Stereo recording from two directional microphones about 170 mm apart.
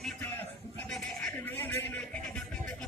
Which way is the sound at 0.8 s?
5° left (ahead or behind).